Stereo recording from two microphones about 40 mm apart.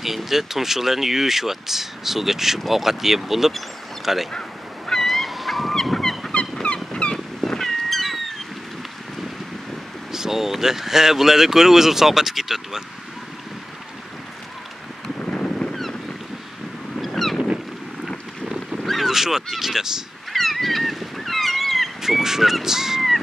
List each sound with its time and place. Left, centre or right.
0.0 s speech: centre
4.3 s fowl: centre
5.0 s goose: centre
6.6 s fowl: left
7.4 s cat: centre
10.1 s speech: centre
15.1 s boat: centre
15.7 s boat: centre
17.0 s boat: centre
18.9 s goose: centre
19.4 s speech: centre
20.3 s goose: centre
22.0 s speech: centre